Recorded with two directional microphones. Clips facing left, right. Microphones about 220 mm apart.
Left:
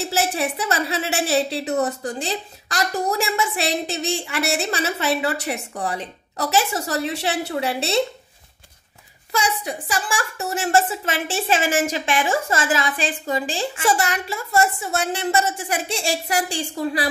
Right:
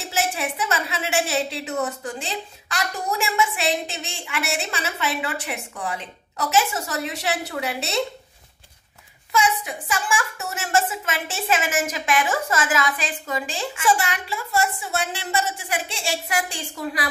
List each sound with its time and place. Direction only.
0.1 s a woman's voice: 35° left (ahead or behind)
9.3 s a woman's voice: 35° left (ahead or behind)